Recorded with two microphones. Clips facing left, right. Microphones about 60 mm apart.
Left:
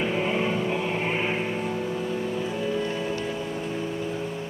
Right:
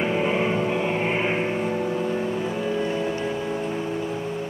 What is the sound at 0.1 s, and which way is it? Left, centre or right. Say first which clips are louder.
Vehicle: right 3 dB; centre.